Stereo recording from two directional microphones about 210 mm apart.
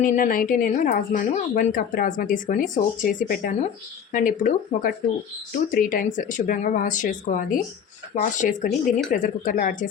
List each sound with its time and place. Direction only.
0.0 s speech: 40° left (ahead or behind)